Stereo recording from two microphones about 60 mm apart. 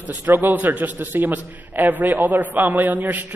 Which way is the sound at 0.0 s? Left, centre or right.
Right.